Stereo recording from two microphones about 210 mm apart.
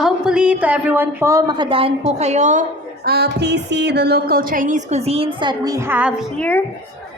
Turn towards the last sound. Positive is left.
turn(degrees=5)  # may be behind; listen again after turning